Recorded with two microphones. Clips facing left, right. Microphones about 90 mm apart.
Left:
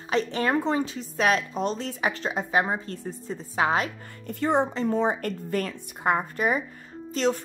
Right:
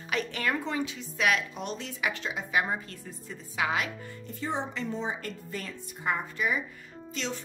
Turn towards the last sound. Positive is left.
turn(degrees=45)  # may be behind; listen again after turning